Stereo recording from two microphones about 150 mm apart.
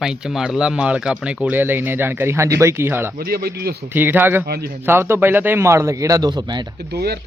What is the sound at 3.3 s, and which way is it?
Speech, 90° right.